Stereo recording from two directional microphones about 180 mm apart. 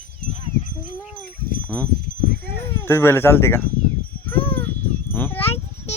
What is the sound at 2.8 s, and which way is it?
Speech, 10° left (ahead or behind).